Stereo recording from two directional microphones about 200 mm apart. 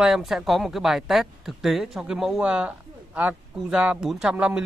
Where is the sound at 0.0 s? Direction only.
Centre (ahead or behind).